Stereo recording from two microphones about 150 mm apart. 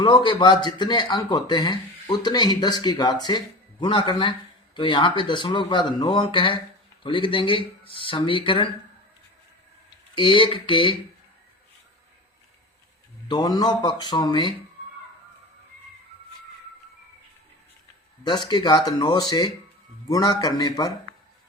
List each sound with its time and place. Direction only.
0.0 s a man's voice: 30° left (ahead or behind)
10.2 s speech: 35° left (ahead or behind)
13.2 s a man's voice: 30° left (ahead or behind)
18.2 s a man's voice: 30° left (ahead or behind)